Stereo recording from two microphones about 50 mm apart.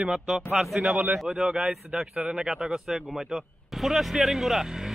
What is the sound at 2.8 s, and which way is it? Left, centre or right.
Speech, centre.